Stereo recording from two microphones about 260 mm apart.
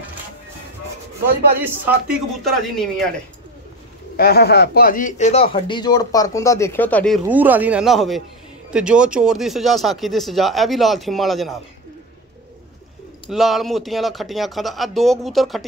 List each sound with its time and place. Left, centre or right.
1.6 s speech: centre
4.2 s speech: left; by 7.2 s centre
7.2 s speech: centre
13.3 s speech: centre